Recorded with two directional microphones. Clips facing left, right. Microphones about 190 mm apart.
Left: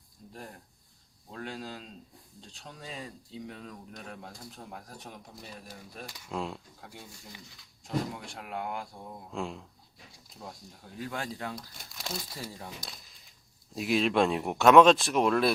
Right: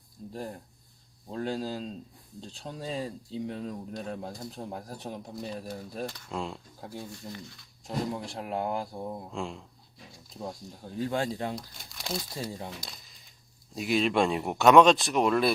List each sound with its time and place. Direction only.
0.2 s a sound: 35° right (ahead or behind)
1.3 s speech: 35° right (ahead or behind)
6.1 s speech: 5° left (ahead or behind)
6.8 s speech: 35° right (ahead or behind)
9.3 s speech: centre (ahead or behind)
10.8 s speech: 30° right (ahead or behind)
13.7 s speech: centre (ahead or behind)